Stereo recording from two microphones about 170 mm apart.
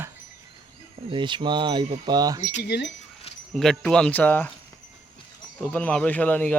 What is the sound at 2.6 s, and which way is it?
Speech, 85° left.